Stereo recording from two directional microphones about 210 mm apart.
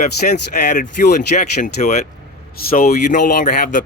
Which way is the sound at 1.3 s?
35° left (ahead or behind).